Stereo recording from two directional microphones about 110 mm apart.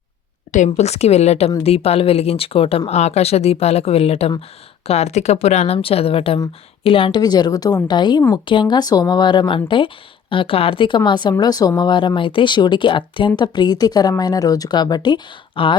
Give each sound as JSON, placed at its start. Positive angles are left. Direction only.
{"t": 0.5, "sound": "speech", "side_deg": 90}
{"t": 1.6, "sound": "speech", "side_deg": 65}
{"t": 4.9, "sound": "speech", "side_deg": 75}
{"t": 7.2, "sound": "speech", "side_deg": 40}